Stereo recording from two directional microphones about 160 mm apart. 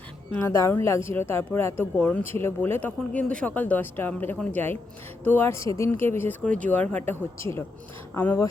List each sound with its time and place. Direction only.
0.4 s speech: 15° left (ahead or behind)